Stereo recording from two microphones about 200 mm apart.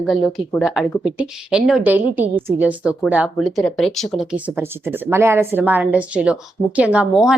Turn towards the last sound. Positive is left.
turn(degrees=-5)  # may be behind; listen again after turning